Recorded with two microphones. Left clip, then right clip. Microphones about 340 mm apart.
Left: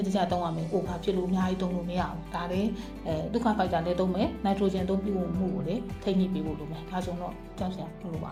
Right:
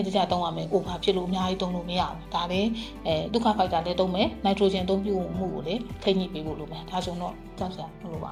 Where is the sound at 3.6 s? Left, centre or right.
Centre.